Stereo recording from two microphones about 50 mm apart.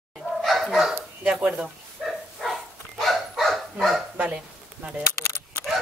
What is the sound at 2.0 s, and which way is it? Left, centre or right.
Dog, centre.